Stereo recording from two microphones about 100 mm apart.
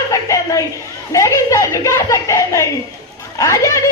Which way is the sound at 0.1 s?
30° left (ahead or behind).